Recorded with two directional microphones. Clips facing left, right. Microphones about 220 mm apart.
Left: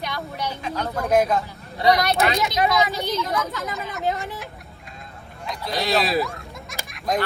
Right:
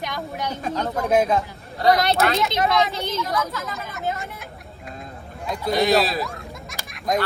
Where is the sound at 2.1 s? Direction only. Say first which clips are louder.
Even; centre (ahead or behind).